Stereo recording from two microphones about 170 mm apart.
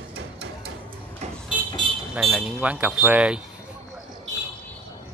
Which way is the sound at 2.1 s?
Centre (ahead or behind).